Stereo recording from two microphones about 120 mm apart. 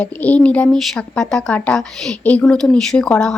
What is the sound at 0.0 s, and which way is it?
Speech, 10° left (ahead or behind).